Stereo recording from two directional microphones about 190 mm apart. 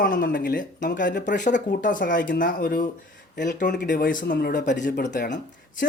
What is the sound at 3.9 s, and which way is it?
Speech, 45° left (ahead or behind).